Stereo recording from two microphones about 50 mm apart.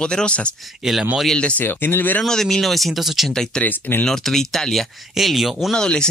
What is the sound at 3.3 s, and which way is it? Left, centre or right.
Speech, centre.